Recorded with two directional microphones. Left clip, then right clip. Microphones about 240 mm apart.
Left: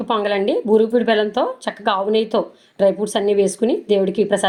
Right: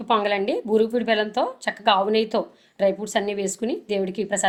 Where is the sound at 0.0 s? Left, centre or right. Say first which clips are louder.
Left 3 dB; left.